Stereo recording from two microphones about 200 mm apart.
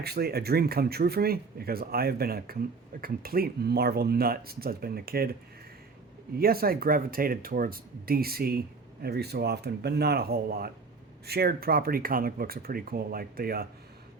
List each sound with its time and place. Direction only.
0.0 s speech: 50° right (ahead or behind)
6.4 s speech: 50° right (ahead or behind)